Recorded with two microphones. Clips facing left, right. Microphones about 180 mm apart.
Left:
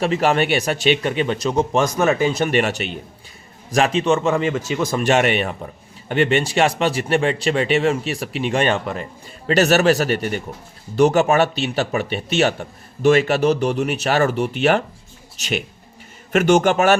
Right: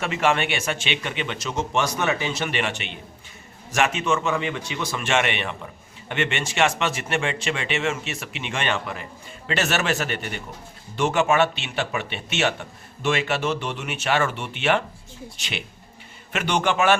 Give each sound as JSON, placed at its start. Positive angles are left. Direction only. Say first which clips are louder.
{"t": 0.0, "sound": "speech", "louder": "left 5 dB", "side_deg": 35}